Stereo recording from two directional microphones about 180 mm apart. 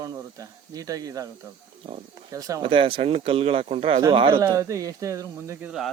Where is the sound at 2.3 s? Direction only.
20° right (ahead or behind).